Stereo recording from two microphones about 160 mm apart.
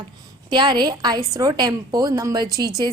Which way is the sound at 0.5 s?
25° right (ahead or behind).